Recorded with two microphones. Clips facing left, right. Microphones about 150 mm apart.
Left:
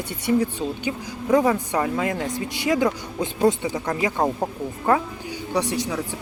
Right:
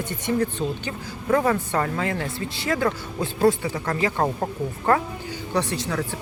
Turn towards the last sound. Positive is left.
turn(degrees=10)  # may be behind; listen again after turning